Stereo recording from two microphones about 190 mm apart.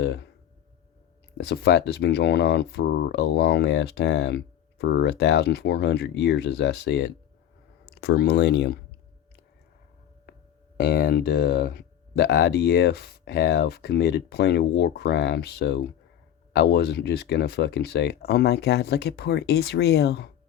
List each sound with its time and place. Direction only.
0.0 s speech: 65° left (ahead or behind)
1.5 s speech: 60° left (ahead or behind)
10.8 s speech: 55° left (ahead or behind)